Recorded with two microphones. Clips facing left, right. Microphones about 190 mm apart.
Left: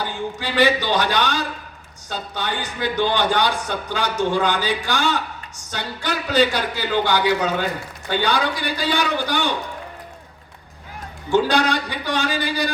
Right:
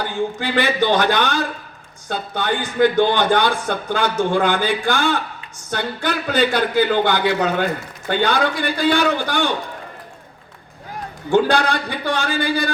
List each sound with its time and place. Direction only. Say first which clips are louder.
0.0 s a man's voice: right 4 dB; 50° right (ahead or behind)
11.3 s a man's voice: right 2 dB; 55° right (ahead or behind)